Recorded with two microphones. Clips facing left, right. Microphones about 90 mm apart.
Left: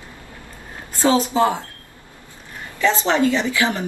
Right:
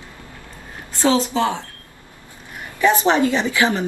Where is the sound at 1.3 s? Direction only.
15° left (ahead or behind).